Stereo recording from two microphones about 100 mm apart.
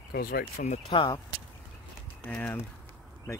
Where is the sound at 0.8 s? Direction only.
70° left (ahead or behind).